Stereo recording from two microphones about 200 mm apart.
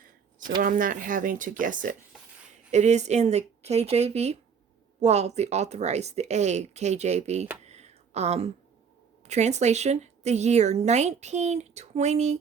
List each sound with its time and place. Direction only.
0.6 s speech: 45° right (ahead or behind)
7.6 s a sound: 35° right (ahead or behind)
9.2 s speech: 35° right (ahead or behind)